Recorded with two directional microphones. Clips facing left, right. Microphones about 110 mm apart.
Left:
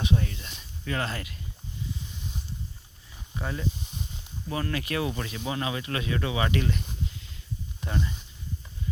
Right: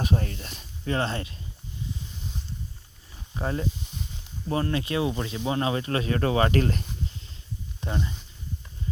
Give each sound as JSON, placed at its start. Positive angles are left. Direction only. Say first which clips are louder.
{"t": 0.0, "sound": "speech", "louder": "right 1 dB", "side_deg": -40}
{"t": 3.3, "sound": "speech", "louder": "right 3 dB", "side_deg": -35}
{"t": 7.8, "sound": "speech", "louder": "right 1 dB", "side_deg": -25}